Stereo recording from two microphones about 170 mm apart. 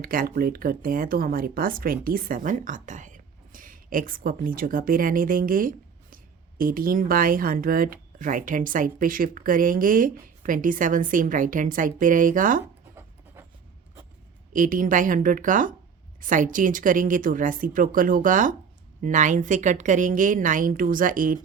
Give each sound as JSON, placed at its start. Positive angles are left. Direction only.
{"t": 0.0, "sound": "a woman's voice", "side_deg": -55}
{"t": 14.5, "sound": "speech", "side_deg": -50}